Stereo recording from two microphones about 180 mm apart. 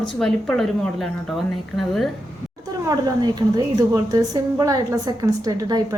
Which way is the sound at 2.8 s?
20° right (ahead or behind).